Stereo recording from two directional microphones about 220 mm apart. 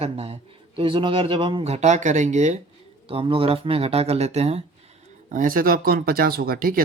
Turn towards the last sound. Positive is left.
turn(degrees=-40)  # may be behind; listen again after turning